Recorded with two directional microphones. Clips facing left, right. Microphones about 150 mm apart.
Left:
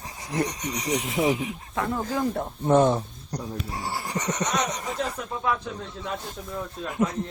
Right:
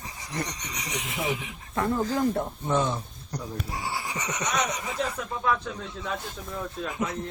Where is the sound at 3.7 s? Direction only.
35° left (ahead or behind).